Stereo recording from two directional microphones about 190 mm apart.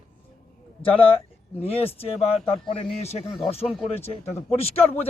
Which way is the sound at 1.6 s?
30° left (ahead or behind).